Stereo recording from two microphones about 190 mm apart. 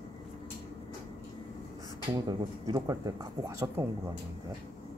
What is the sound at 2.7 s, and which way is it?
Speech, 20° right (ahead or behind).